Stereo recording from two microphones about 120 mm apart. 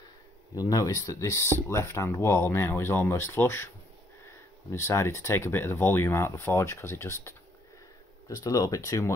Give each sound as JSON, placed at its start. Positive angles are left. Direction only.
{"t": 0.6, "sound": "speech", "side_deg": 30}